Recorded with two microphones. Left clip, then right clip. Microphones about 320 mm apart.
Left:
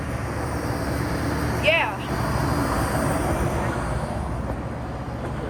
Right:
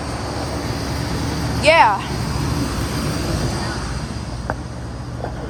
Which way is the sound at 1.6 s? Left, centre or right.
Centre.